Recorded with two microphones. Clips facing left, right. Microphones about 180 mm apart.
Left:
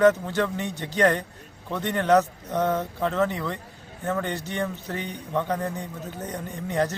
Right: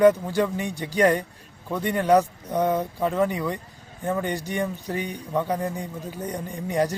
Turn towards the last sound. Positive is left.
turn(degrees=-10)  # may be behind; listen again after turning